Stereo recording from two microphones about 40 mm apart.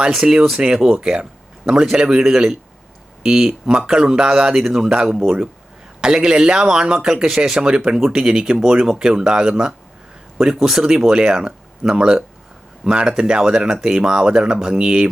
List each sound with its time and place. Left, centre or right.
0.0 s speech: centre
6.0 s speech: centre